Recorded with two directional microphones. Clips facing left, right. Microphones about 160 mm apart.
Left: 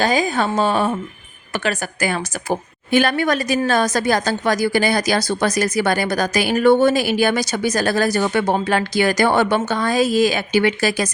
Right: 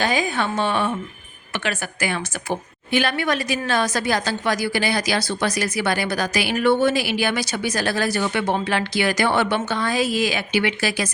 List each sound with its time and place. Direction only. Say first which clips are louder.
0.0 s a woman's voice: left 4 dB; 40° left (ahead or behind)